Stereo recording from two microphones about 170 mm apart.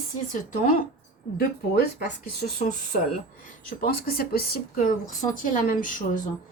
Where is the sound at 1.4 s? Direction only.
60° left (ahead or behind).